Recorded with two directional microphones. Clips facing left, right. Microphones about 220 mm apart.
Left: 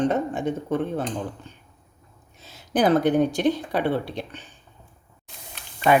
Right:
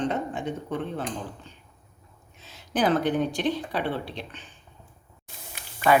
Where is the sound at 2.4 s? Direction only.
45° left (ahead or behind).